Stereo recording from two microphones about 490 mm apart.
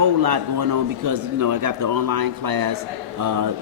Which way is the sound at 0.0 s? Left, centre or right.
Right.